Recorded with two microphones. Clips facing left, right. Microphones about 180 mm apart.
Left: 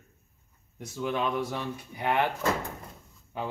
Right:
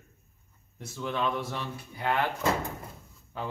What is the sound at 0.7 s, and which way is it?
Speech, 15° left (ahead or behind).